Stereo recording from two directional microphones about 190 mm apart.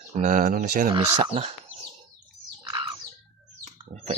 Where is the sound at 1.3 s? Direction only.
30° right (ahead or behind).